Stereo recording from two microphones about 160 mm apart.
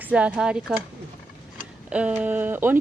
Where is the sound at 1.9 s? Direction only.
10° right (ahead or behind).